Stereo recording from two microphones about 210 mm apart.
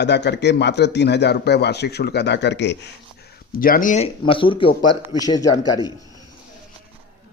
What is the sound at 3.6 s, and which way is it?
Speech, 40° left (ahead or behind).